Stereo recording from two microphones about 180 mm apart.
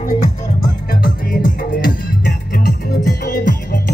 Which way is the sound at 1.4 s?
50° left (ahead or behind).